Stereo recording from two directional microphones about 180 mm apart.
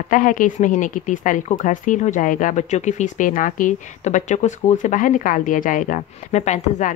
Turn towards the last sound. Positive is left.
turn(degrees=40)  # may be behind; listen again after turning